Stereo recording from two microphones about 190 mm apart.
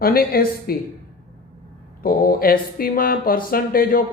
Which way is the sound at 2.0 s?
50° left (ahead or behind).